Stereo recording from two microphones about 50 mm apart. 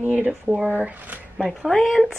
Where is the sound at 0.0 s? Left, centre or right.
Right.